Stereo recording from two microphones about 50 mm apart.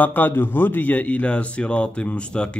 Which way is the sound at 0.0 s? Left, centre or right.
Left.